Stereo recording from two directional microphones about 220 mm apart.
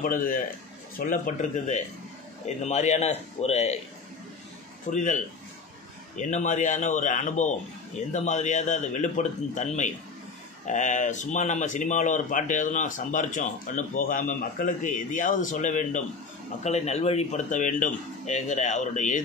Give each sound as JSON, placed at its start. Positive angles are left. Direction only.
{"t": 0.0, "sound": "a man's voice", "side_deg": 40}
{"t": 4.9, "sound": "speech", "side_deg": 35}